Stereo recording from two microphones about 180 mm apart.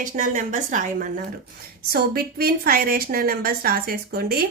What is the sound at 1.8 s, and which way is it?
A woman's voice, 60° right (ahead or behind).